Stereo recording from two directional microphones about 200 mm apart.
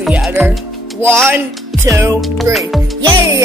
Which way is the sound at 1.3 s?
Centre (ahead or behind).